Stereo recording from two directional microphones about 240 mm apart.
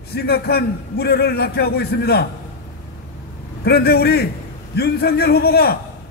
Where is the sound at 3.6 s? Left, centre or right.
Left.